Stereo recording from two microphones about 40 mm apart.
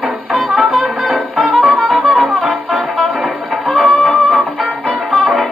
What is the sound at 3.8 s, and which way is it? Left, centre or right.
Chicken, left.